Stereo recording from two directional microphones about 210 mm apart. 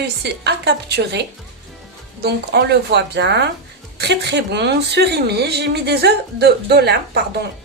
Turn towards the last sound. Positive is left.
turn(degrees=-50)  # may be behind; listen again after turning